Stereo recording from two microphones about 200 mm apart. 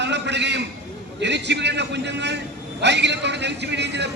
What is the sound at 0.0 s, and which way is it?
A man's voice, 60° right (ahead or behind).